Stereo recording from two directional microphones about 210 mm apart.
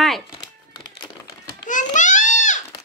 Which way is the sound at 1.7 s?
35° left (ahead or behind).